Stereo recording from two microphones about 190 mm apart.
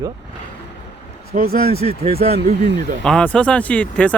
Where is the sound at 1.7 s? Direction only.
30° right (ahead or behind).